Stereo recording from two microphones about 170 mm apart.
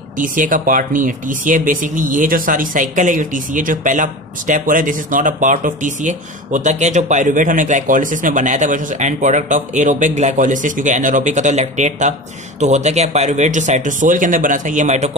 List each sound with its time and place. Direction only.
0.2 s speech: 50° right (ahead or behind)